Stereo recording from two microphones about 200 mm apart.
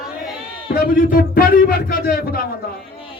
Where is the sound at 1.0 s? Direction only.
45° left (ahead or behind).